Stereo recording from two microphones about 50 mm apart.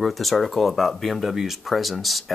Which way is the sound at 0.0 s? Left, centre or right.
Centre.